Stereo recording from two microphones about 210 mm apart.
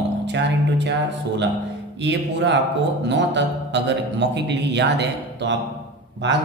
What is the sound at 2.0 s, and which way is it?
A man's voice, 55° right (ahead or behind).